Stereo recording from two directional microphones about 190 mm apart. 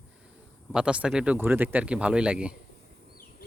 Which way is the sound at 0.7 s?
5° right (ahead or behind).